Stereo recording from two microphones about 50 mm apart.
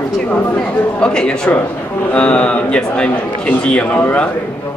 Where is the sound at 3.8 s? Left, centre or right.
Left.